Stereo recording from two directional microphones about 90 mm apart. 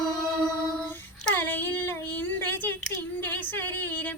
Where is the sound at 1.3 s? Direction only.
20° left (ahead or behind).